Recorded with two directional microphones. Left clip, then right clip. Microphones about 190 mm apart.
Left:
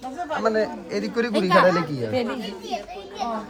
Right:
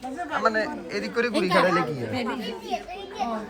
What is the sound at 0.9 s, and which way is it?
Speech, 55° left (ahead or behind).